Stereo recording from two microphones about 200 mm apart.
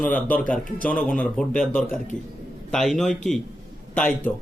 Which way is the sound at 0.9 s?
5° left (ahead or behind).